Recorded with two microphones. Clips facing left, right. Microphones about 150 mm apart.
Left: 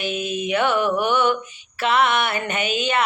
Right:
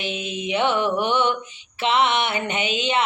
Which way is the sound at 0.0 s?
20° right (ahead or behind).